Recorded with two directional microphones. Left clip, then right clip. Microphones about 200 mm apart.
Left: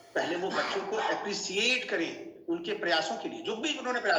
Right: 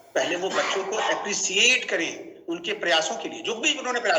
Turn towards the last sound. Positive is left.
turn(degrees=-30)  # may be behind; listen again after turning